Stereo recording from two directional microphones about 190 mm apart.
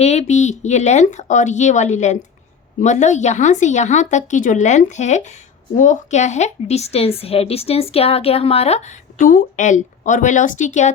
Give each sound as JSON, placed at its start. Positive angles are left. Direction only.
{"t": 0.0, "sound": "a woman's voice", "side_deg": 35}